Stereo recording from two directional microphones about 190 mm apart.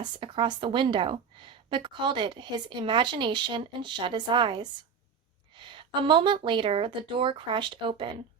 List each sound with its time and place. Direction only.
0.0 s a woman's voice: 25° right (ahead or behind)